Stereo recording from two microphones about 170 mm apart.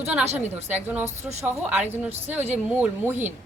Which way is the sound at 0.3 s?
10° right (ahead or behind).